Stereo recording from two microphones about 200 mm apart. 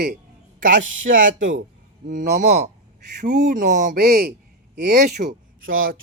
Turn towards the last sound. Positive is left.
turn(degrees=-45)  # may be behind; listen again after turning